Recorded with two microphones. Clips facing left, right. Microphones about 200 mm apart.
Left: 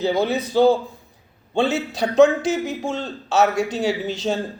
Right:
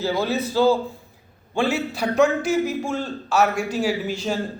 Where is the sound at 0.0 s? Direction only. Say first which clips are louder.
Left 2 dB; 20° left (ahead or behind).